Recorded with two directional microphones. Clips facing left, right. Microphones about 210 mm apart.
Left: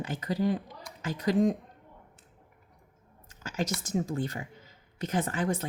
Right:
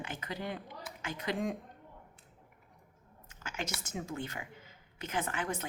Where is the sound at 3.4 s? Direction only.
35° left (ahead or behind).